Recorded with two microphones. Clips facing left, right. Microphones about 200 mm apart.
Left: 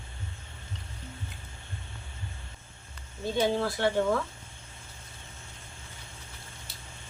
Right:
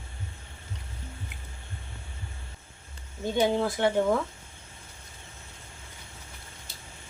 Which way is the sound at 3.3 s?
15° right (ahead or behind).